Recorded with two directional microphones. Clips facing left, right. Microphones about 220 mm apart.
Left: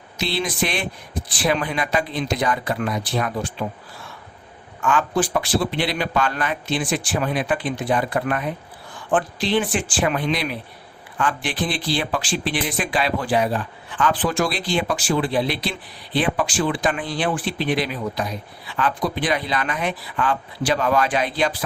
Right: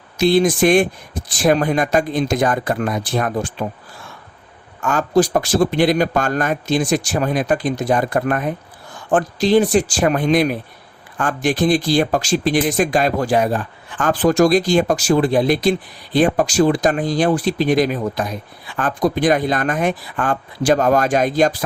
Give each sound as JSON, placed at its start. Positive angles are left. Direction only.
{"t": 0.2, "sound": "speech", "side_deg": -45}
{"t": 4.8, "sound": "speech", "side_deg": -40}